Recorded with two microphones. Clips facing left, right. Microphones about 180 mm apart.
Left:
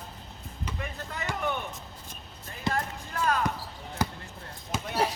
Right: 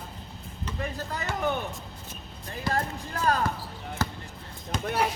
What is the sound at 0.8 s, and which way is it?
Basketball bounce, 35° right (ahead or behind).